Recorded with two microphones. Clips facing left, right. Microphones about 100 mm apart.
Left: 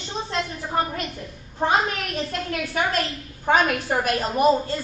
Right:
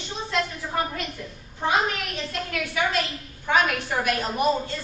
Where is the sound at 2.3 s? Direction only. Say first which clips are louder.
Left 2 dB; 45° left (ahead or behind).